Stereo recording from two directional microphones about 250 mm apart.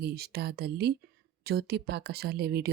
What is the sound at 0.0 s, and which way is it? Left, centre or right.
Speech, right.